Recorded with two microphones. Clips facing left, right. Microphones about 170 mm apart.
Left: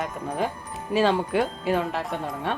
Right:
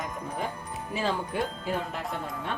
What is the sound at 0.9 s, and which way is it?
Speech, 80° left.